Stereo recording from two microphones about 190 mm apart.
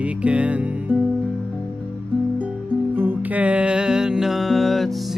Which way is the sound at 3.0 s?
10° right (ahead or behind).